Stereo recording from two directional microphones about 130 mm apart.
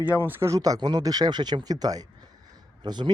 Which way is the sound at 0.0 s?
15° right (ahead or behind).